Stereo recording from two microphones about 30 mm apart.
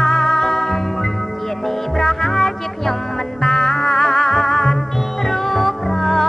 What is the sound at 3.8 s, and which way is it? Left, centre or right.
Music, left.